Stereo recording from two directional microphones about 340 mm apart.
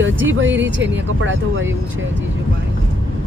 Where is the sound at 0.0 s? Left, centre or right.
Right.